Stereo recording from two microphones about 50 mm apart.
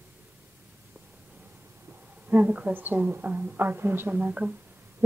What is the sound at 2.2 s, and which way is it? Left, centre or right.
A woman's voice, right.